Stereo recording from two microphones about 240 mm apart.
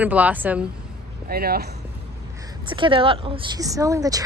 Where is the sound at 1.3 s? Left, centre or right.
Right.